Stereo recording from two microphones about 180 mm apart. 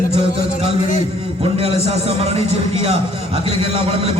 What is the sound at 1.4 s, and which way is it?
A man's voice, 35° right (ahead or behind).